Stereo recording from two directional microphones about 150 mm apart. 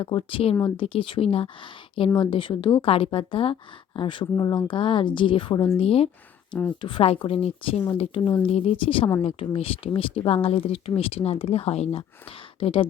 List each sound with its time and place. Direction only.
0.0 s speech: 35° left (ahead or behind)
6.5 s speech: 10° left (ahead or behind)
6.8 s speech: 35° left (ahead or behind)